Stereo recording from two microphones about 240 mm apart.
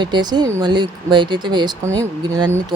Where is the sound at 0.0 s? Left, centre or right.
Centre.